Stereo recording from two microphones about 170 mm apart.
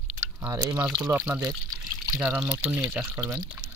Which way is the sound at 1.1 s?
15° right (ahead or behind).